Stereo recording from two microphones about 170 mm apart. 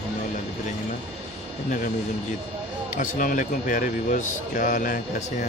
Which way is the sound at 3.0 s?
50° left (ahead or behind).